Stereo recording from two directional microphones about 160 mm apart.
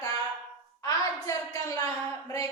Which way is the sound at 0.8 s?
20° left (ahead or behind).